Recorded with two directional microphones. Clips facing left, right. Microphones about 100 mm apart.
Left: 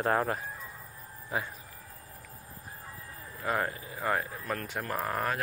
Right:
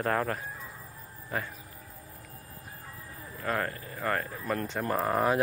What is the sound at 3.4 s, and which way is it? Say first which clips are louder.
Speech: even; 10° left (ahead or behind).